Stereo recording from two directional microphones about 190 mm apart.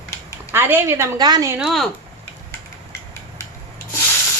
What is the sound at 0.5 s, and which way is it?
A woman's voice, 10° right (ahead or behind).